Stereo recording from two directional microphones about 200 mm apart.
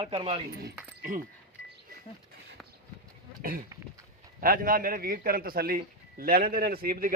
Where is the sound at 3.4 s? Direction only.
45° right (ahead or behind).